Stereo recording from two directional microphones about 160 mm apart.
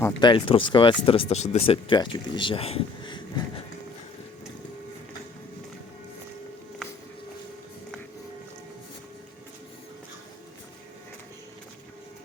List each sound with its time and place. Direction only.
0.2 s speech: 30° left (ahead or behind)